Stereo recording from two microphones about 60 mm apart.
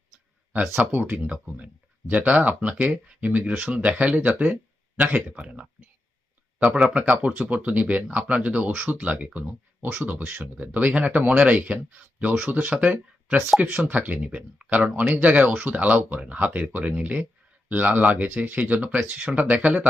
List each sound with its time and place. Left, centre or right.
0.5 s speech: right
6.8 s speech: centre
7.2 s speech: right